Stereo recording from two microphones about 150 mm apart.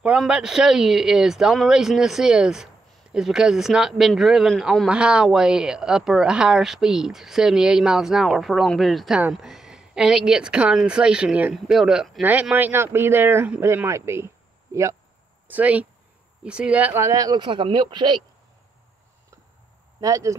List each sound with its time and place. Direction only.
0.0 s speech: 5° right (ahead or behind); by 18.2 s 30° right (ahead or behind)
20.0 s speech: 20° right (ahead or behind)